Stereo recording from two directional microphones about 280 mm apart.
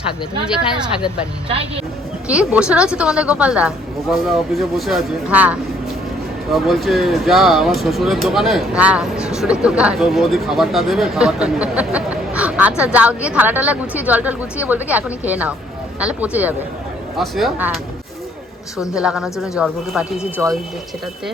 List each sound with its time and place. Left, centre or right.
0.4 s speech: centre
1.5 s speech: centre
2.2 s speech: centre
18.9 s speech: centre